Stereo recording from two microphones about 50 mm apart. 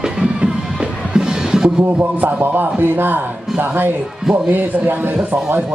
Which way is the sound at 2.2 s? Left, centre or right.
Right.